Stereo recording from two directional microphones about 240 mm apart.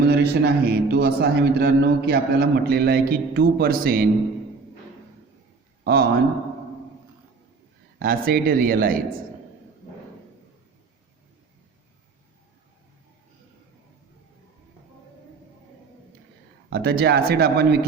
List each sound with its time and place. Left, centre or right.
0.0 s a man's voice: right
5.8 s speech: right
7.9 s a man's voice: right
16.6 s a man's voice: right